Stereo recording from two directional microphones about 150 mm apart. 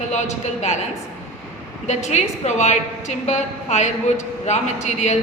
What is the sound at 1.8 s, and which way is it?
A woman's voice, 50° left (ahead or behind).